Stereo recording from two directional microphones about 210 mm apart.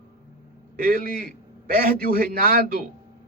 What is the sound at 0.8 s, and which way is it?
Speech, 45° right (ahead or behind).